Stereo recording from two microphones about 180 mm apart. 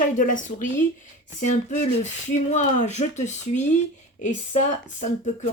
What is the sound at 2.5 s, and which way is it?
Speech, 40° left (ahead or behind).